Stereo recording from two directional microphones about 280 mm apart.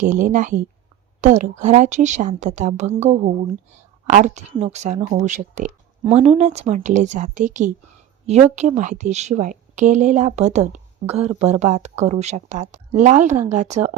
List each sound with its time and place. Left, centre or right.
0.0 s a woman's voice: right